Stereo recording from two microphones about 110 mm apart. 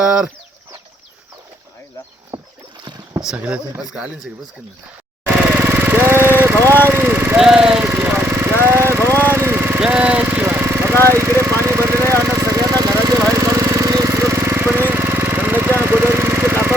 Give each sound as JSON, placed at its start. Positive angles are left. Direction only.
{"t": 0.0, "sound": "speech", "side_deg": -10}
{"t": 2.3, "sound": "rowboat", "side_deg": -35}
{"t": 3.2, "sound": "speech", "side_deg": -10}
{"t": 5.2, "sound": "vehicle", "side_deg": -15}
{"t": 6.8, "sound": "speech", "side_deg": -20}
{"t": 7.3, "sound": "speech", "side_deg": -5}
{"t": 7.9, "sound": "lawn mower", "side_deg": -20}
{"t": 8.6, "sound": "vehicle", "side_deg": -25}
{"t": 11.1, "sound": "speech", "side_deg": -25}
{"t": 11.6, "sound": "vehicle", "side_deg": -25}